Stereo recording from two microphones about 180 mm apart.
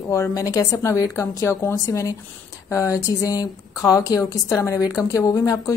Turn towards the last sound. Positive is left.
turn(degrees=20)  # may be behind; listen again after turning